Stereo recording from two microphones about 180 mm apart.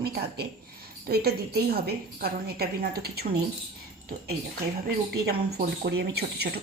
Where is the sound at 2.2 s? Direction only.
60° right (ahead or behind).